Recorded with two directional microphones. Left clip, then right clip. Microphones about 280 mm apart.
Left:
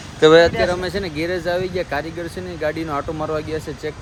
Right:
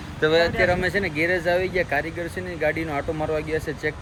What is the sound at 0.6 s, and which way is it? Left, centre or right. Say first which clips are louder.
Speech: left 1 dB; centre.